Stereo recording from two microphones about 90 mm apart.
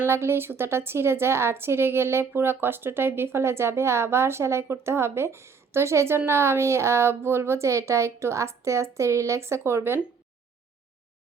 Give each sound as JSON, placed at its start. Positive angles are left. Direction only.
{"t": 0.1, "sound": "a woman's voice", "side_deg": -25}